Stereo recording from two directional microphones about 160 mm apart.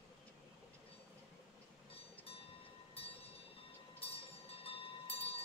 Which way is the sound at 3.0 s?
40° left (ahead or behind).